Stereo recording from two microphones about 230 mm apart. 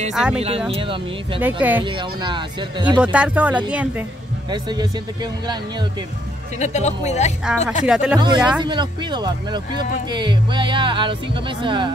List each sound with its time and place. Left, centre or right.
0.1 s speech: centre
0.7 s speech: right
1.4 s speech: centre
1.8 s speech: right
3.0 s speech: centre
4.5 s speech: centre
6.6 s speech: left
7.8 s speech: centre
8.2 s speech: centre